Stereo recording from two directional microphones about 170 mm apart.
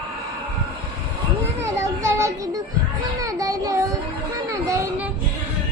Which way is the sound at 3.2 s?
20° right (ahead or behind).